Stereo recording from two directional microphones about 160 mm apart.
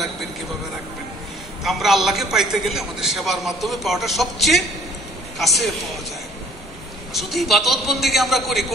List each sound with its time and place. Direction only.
1.6 s a man's voice: centre (ahead or behind)
7.2 s a man's voice: centre (ahead or behind)